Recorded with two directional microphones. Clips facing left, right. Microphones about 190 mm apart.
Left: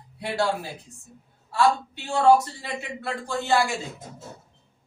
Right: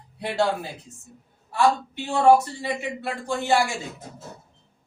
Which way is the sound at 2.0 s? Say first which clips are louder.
Right 1 dB; 20° right (ahead or behind).